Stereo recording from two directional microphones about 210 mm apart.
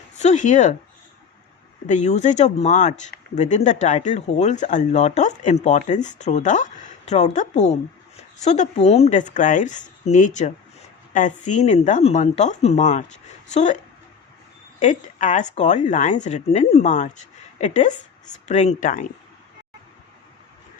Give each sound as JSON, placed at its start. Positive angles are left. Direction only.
{"t": 0.2, "sound": "speech", "side_deg": 35}
{"t": 1.9, "sound": "speech", "side_deg": 35}